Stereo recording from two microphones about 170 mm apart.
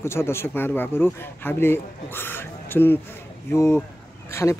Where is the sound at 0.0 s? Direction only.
15° left (ahead or behind).